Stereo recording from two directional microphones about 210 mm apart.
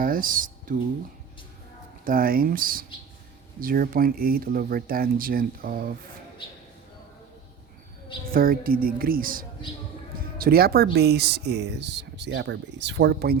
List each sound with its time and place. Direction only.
0.0 s a sound: 40° right (ahead or behind)
2.0 s speech: 45° right (ahead or behind)
8.3 s speech: 45° right (ahead or behind)